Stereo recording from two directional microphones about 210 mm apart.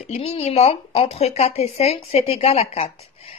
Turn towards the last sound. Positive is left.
turn(degrees=30)  # may be behind; listen again after turning